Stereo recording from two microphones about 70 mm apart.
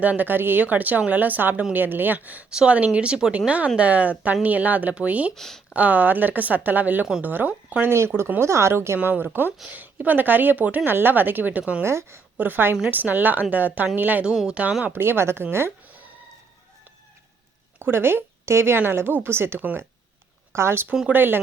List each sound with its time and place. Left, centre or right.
0.0 s speech: right
5.3 s speech: centre
5.7 s speech: right
7.9 s speech: right
9.0 s speech: right
11.8 s speech: right
14.3 s speech: centre
14.9 s speech: right
17.7 s speech: right